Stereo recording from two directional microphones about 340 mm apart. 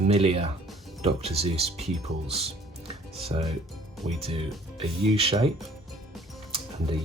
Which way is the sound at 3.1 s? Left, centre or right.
Centre.